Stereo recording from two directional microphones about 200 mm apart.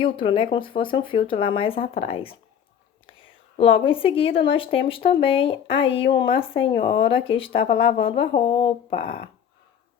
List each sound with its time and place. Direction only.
0.0 s a woman's voice: 25° left (ahead or behind)